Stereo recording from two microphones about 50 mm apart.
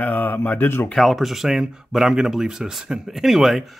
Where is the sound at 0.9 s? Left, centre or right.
Centre.